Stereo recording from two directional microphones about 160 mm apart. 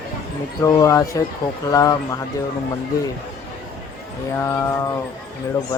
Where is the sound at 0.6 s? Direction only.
20° left (ahead or behind).